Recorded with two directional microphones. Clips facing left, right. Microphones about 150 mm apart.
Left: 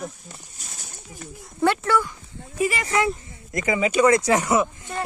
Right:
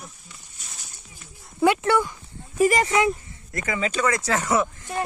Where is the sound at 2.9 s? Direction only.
15° right (ahead or behind).